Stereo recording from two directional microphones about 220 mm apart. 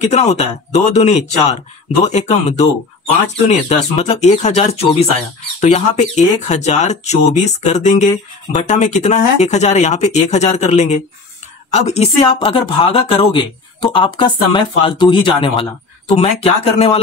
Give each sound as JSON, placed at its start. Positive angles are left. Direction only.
{"t": 0.0, "sound": "a woman's voice", "side_deg": 30}